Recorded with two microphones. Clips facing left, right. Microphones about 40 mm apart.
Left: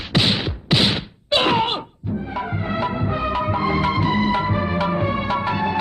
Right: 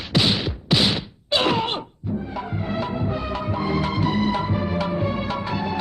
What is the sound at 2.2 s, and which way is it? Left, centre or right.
Music, left.